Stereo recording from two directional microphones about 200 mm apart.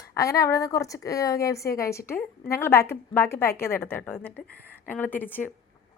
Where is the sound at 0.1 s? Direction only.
15° left (ahead or behind).